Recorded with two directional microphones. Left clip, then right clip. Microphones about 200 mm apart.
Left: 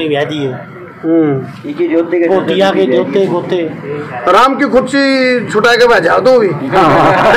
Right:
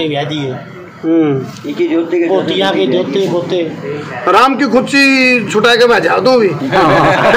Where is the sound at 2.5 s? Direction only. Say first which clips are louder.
Left 2 dB; 30° left (ahead or behind).